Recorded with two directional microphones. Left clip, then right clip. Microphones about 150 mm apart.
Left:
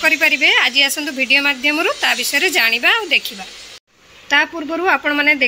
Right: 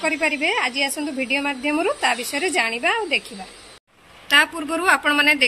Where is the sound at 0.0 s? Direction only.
5° right (ahead or behind).